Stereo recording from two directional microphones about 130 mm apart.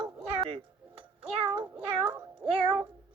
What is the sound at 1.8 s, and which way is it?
Cat, 45° right (ahead or behind).